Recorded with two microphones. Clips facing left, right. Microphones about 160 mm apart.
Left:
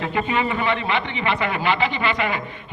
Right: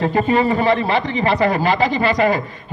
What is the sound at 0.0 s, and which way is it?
A man's voice, 35° right (ahead or behind).